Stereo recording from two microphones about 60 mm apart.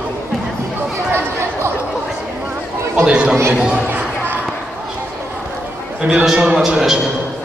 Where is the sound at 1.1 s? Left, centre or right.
Right.